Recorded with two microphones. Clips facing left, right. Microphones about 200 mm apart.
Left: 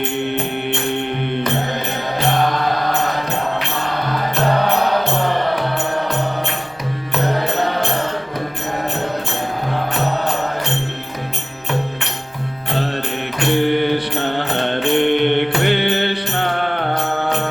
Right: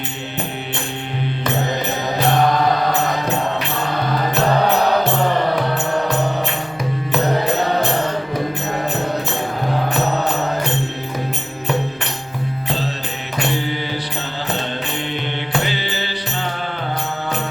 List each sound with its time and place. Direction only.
13.5 s mantra: 60° left (ahead or behind)